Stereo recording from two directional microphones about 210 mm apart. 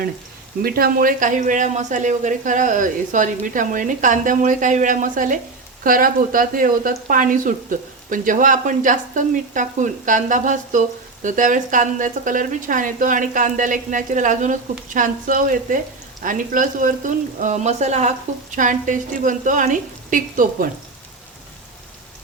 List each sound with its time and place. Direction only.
0.6 s speech: 45° right (ahead or behind)